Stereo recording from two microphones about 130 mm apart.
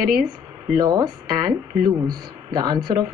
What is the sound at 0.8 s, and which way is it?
Speech, 30° right (ahead or behind).